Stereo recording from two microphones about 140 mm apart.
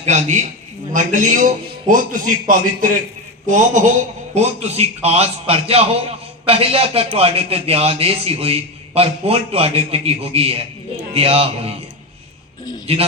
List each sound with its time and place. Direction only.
0.1 s a man's voice: 55° right (ahead or behind)
0.9 s a man's voice: 65° right (ahead or behind)
3.4 s a man's voice: 65° right (ahead or behind)
4.4 s a man's voice: 50° right (ahead or behind)
12.9 s a man's voice: 45° right (ahead or behind)